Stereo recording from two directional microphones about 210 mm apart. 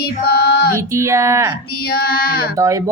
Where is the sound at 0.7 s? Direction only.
15° right (ahead or behind).